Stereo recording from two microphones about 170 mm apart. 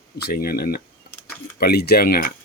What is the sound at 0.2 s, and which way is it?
Speech, 65° left (ahead or behind).